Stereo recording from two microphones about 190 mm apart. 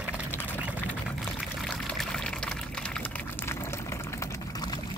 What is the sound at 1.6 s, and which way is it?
Water, 5° left (ahead or behind).